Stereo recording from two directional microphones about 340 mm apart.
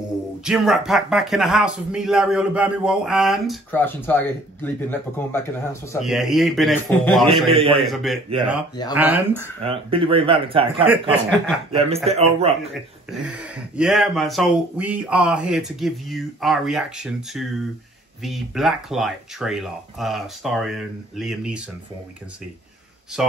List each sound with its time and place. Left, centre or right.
0.4 s speech: centre
7.5 s speech: centre
7.8 s speech: centre
10.9 s speech: centre
11.7 s speech: centre
12.7 s speech: centre